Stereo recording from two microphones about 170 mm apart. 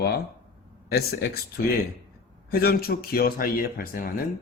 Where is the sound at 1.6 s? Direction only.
60° left (ahead or behind).